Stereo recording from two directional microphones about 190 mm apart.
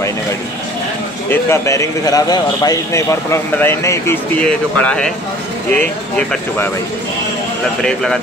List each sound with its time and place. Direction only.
1.3 s speech: 15° left (ahead or behind)
7.8 s speech: centre (ahead or behind)